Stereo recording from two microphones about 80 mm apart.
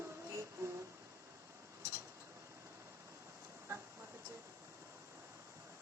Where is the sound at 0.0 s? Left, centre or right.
Right.